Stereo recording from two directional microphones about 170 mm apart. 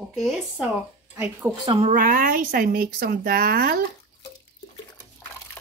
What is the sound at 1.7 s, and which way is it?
Speech, 40° right (ahead or behind).